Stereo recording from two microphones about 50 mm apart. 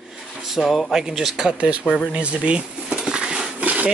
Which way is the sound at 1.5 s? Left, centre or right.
Right.